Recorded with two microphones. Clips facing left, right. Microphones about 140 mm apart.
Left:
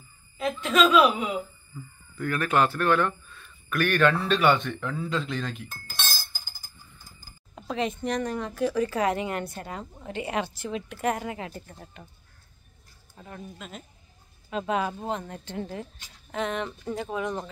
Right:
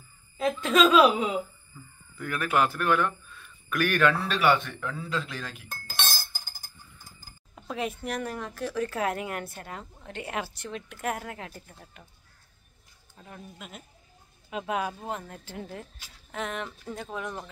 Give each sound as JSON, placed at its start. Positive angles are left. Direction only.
{"t": 0.4, "sound": "speech", "side_deg": -35}
{"t": 2.1, "sound": "speech", "side_deg": -10}
{"t": 7.5, "sound": "a woman's voice", "side_deg": -5}
{"t": 13.2, "sound": "a woman's voice", "side_deg": -5}